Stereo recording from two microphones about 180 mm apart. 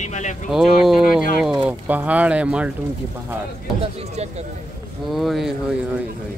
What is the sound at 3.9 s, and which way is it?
Speech, 35° right (ahead or behind).